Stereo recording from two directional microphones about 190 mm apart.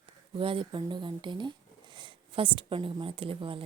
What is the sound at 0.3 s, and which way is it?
Speech, 25° right (ahead or behind).